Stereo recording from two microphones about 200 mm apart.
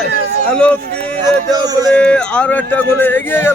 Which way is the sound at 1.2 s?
20° right (ahead or behind).